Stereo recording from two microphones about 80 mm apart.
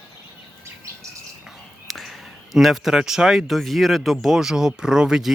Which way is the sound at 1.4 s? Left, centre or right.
Centre.